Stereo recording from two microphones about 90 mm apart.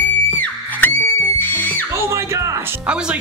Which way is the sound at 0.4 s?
20° left (ahead or behind).